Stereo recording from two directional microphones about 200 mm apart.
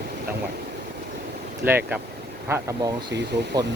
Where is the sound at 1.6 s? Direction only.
10° right (ahead or behind).